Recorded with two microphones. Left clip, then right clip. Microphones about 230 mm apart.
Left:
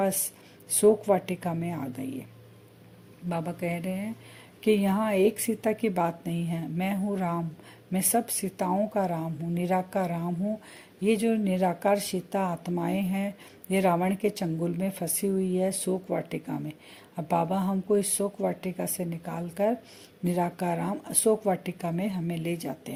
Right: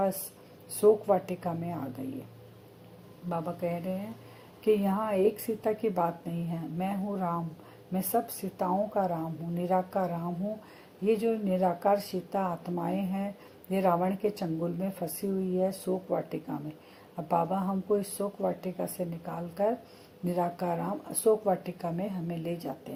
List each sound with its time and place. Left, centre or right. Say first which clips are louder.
0.8 s speech: left 2 dB; left
3.2 s speech: left 1 dB; left